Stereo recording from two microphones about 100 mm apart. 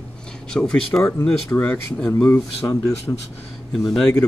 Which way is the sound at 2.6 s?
35° left (ahead or behind).